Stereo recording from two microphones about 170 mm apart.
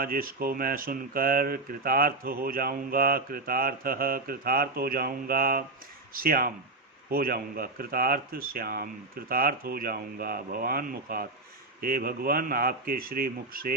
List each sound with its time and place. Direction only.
0.0 s speech: 60° right (ahead or behind)